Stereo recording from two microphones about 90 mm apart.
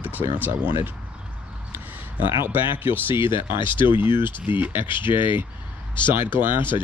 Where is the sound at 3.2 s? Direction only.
65° left (ahead or behind).